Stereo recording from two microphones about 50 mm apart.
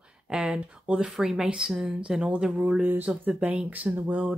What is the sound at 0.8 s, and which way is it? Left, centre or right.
Speech, right.